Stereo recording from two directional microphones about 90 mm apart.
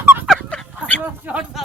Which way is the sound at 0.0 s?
20° right (ahead or behind).